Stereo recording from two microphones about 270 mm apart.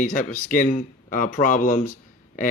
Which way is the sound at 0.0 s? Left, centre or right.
Left.